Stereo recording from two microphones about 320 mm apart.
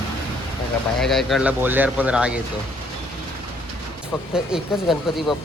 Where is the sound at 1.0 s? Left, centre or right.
Centre.